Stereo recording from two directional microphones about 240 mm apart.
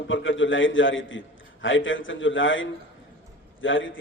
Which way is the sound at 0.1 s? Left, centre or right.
Left.